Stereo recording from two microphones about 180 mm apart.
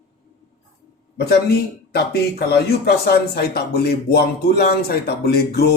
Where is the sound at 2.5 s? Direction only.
60° left (ahead or behind).